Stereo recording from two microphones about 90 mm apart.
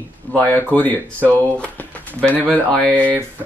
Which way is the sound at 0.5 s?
20° left (ahead or behind).